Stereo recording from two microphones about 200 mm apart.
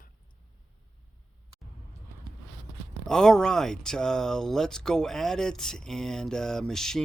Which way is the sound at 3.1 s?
5° left (ahead or behind).